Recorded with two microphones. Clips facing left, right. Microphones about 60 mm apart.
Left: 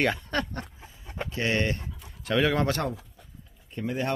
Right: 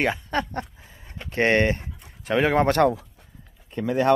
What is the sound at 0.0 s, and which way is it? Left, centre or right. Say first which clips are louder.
Speech: right 2 dB; centre.